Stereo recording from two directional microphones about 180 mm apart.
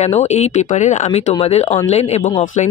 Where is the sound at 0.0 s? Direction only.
40° left (ahead or behind).